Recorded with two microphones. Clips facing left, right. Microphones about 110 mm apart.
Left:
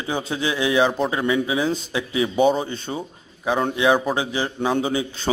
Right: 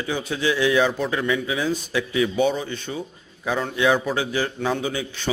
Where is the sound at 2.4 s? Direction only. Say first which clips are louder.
Left 3 dB; 35° left (ahead or behind).